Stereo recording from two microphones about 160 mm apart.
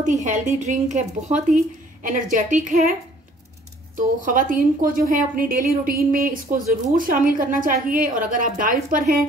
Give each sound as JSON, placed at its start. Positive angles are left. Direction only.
{"t": 0.0, "sound": "a woman's voice", "side_deg": -50}
{"t": 4.2, "sound": "a woman's voice", "side_deg": -60}